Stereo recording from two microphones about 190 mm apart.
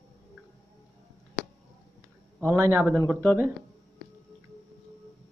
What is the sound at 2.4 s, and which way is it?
Speech, 15° right (ahead or behind).